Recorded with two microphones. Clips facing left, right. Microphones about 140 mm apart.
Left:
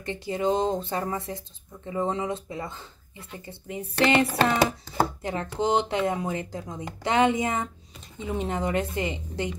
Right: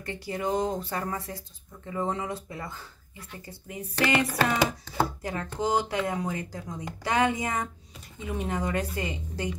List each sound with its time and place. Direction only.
0.0 s speech: 20° left (ahead or behind)